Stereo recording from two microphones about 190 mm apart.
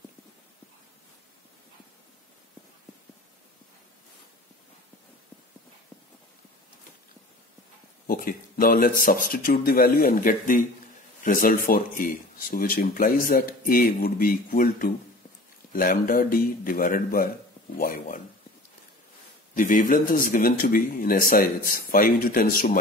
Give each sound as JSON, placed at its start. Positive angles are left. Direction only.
{"t": 8.1, "sound": "speech", "side_deg": 50}
{"t": 19.5, "sound": "speech", "side_deg": 45}